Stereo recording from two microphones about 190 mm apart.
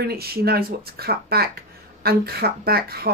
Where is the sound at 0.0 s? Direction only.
55° right (ahead or behind).